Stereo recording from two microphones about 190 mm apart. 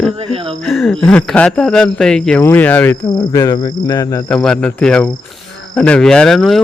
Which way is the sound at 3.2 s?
20° left (ahead or behind).